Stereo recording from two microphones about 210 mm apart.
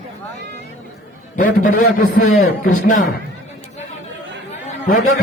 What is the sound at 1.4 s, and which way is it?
Speech, 40° left (ahead or behind).